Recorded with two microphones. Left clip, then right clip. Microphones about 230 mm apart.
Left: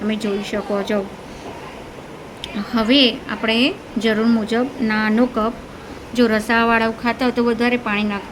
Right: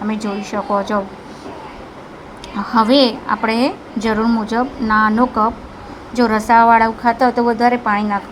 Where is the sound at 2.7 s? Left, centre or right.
Centre.